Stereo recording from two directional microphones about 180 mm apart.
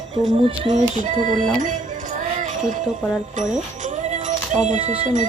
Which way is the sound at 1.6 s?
45° right (ahead or behind).